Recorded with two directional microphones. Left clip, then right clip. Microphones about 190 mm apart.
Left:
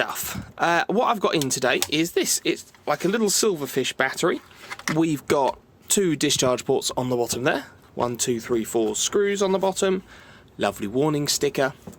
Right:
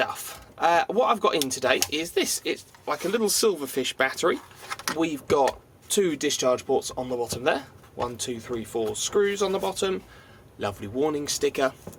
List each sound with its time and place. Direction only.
0.0 s speech: 55° left (ahead or behind); by 4.4 s 35° left (ahead or behind)
4.9 s speech: 55° left (ahead or behind)